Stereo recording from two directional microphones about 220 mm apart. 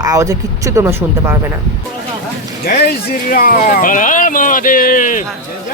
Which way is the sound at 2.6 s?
45° left (ahead or behind).